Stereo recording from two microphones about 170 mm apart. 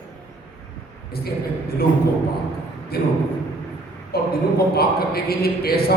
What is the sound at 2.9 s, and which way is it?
Speech, 65° left (ahead or behind).